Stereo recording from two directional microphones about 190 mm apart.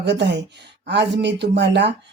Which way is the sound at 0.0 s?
65° right (ahead or behind).